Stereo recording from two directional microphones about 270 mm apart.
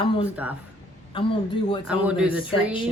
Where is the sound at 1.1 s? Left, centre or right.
Centre.